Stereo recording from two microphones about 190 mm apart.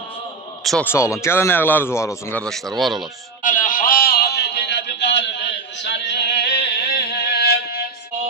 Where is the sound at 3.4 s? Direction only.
45° left (ahead or behind).